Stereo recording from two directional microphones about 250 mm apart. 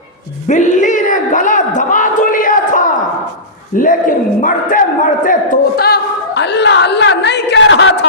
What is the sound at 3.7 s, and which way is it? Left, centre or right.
A man's voice, left.